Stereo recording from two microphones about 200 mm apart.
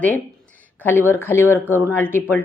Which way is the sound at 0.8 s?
10° left (ahead or behind).